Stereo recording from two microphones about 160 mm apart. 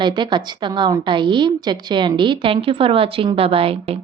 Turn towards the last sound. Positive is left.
turn(degrees=-35)  # may be behind; listen again after turning